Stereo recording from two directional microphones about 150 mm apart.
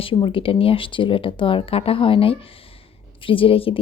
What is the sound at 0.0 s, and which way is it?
Speech, 35° left (ahead or behind).